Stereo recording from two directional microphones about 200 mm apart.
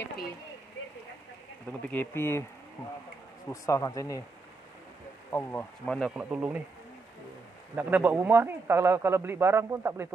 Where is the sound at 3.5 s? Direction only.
15° left (ahead or behind).